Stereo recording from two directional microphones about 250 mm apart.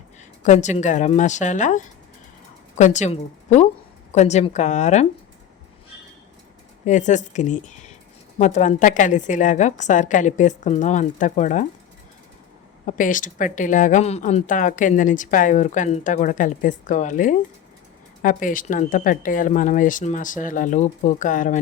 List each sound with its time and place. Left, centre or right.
0.4 s a woman's voice: left
6.8 s a woman's voice: left
12.8 s speech: left